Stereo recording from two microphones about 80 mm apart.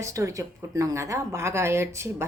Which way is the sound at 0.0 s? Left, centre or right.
Right.